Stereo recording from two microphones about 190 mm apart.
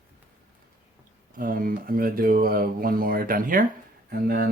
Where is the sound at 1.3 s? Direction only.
45° right (ahead or behind).